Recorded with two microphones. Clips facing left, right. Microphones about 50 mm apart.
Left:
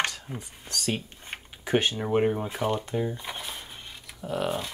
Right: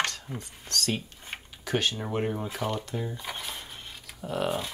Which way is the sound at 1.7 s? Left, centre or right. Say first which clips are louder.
Left 4 dB; left.